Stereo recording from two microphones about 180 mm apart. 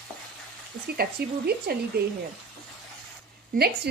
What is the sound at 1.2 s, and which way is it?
Speech, 60° right (ahead or behind).